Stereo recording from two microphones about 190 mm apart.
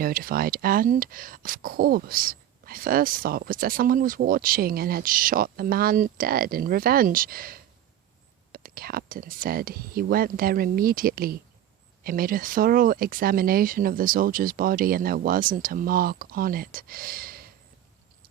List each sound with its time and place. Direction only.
0.0 s speech: 50° right (ahead or behind)